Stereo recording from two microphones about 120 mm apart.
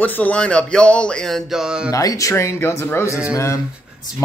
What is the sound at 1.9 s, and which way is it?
Speech, 30° left (ahead or behind).